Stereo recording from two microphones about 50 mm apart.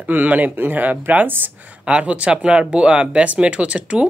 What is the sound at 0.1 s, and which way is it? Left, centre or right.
Speech, right.